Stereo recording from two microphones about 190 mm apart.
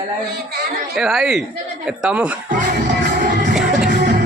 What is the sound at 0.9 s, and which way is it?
A man's voice, centre (ahead or behind).